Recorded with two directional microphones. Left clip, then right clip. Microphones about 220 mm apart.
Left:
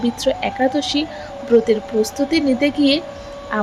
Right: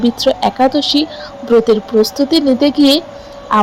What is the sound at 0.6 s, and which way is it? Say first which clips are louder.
A woman's voice: right 6 dB; 10° left (ahead or behind).